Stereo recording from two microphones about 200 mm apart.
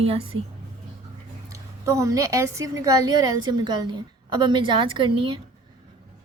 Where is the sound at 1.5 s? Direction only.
15° right (ahead or behind).